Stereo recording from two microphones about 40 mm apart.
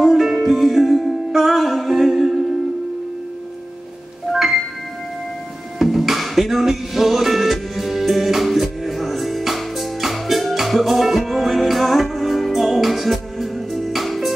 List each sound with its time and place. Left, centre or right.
0.0 s music: centre
4.3 s music: centre
5.8 s music: centre